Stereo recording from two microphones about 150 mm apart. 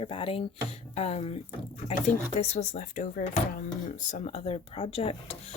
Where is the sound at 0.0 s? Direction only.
35° left (ahead or behind).